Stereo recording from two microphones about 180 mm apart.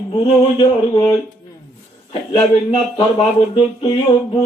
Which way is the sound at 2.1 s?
30° left (ahead or behind).